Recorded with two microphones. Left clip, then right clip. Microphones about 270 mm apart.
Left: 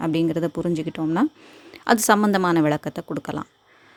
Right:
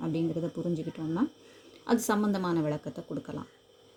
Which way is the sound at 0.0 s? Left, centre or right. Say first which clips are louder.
Left 10 dB; left.